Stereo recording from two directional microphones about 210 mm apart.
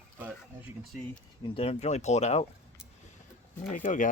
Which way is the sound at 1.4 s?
25° left (ahead or behind).